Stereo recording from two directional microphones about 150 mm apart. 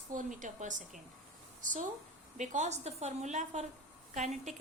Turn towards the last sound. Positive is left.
turn(degrees=-50)  # may be behind; listen again after turning